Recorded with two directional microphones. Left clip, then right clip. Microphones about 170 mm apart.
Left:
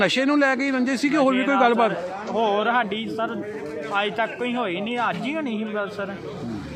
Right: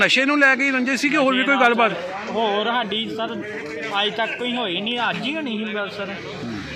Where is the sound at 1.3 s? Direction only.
15° left (ahead or behind).